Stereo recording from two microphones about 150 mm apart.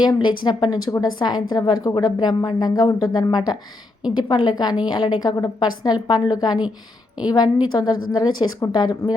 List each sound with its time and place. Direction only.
0.0 s a woman's voice: 30° left (ahead or behind)